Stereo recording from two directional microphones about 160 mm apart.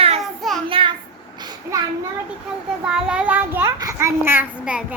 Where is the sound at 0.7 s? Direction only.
35° right (ahead or behind).